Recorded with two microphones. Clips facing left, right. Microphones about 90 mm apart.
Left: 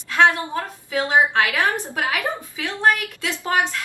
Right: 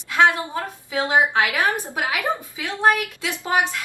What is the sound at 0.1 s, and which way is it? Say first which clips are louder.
A woman's voice: left 1 dB; 15° right (ahead or behind).